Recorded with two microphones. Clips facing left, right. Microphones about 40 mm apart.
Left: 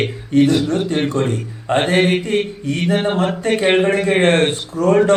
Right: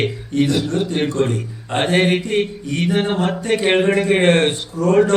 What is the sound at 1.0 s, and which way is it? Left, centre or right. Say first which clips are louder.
Speech: right 1 dB; centre.